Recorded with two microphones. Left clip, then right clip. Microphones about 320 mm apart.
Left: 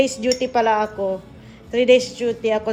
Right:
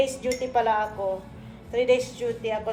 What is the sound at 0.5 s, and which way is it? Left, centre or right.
A woman's voice, left.